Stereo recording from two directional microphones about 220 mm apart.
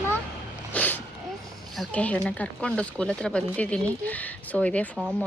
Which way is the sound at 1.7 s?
5° left (ahead or behind).